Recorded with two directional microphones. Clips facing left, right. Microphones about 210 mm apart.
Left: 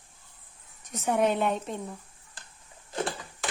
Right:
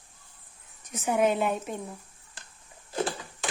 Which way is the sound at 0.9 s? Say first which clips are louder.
Even; centre (ahead or behind).